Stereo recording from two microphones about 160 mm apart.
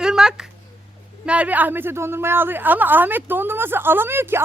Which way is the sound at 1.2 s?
10° right (ahead or behind).